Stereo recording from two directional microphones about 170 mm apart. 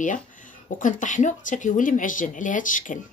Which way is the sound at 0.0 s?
50° left (ahead or behind).